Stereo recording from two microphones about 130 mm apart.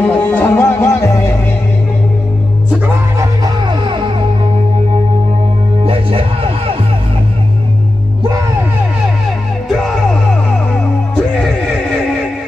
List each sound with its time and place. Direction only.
0.0 s music: 10° left (ahead or behind)
3.2 s music: 35° right (ahead or behind)
5.9 s music: 45° right (ahead or behind)
9.7 s music: centre (ahead or behind)